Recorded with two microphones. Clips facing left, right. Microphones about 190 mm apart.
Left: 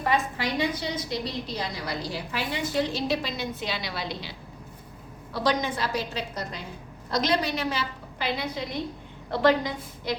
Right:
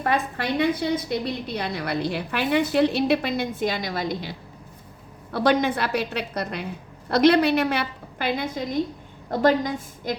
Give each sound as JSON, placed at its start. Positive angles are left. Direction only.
{"t": 0.0, "sound": "a woman's voice", "side_deg": -60}
{"t": 5.3, "sound": "a woman's voice", "side_deg": -60}